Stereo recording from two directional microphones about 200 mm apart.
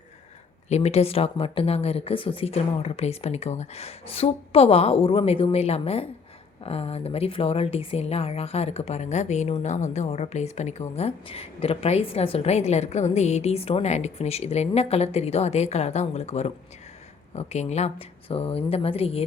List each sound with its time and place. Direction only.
0.7 s speech: 30° left (ahead or behind)